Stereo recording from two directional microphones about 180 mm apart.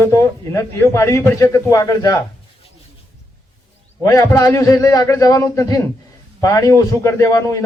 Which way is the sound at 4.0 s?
20° left (ahead or behind).